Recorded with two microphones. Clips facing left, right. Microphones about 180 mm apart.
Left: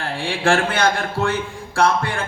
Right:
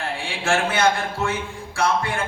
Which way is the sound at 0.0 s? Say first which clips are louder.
Left 6 dB; 60° left (ahead or behind).